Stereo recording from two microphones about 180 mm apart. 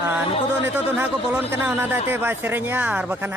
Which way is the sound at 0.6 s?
10° right (ahead or behind).